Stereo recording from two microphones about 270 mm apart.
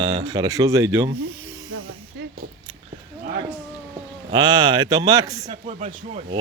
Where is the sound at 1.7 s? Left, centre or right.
Right.